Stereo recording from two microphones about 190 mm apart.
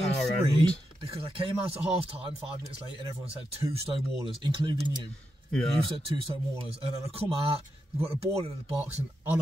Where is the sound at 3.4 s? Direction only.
30° right (ahead or behind).